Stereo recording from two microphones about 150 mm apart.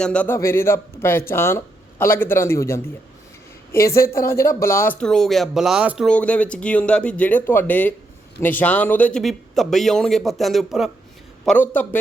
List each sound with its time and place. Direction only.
0.0 s a man's voice: 10° left (ahead or behind)
6.1 s a man's voice: 10° left (ahead or behind)
11.4 s a man's voice: 10° left (ahead or behind)